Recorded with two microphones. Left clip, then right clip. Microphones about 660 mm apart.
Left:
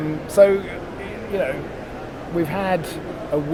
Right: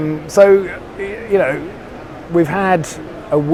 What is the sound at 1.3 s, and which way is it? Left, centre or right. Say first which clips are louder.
Speech: right 8 dB; right.